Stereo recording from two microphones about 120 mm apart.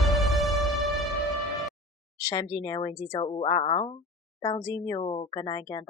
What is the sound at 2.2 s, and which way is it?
Speech, 35° left (ahead or behind).